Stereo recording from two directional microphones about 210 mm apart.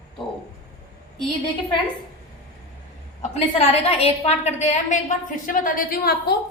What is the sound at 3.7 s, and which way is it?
A woman's voice, 30° left (ahead or behind).